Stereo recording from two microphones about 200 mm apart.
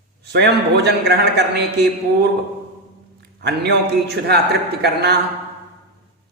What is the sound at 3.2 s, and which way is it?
A man's voice, 55° right (ahead or behind).